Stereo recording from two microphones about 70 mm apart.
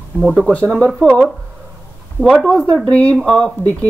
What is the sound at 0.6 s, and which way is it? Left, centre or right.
Speech, centre.